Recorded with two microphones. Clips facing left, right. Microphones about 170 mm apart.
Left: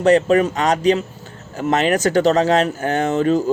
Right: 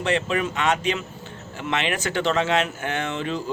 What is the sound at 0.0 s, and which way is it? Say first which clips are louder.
Speech: left 10 dB; 40° left (ahead or behind).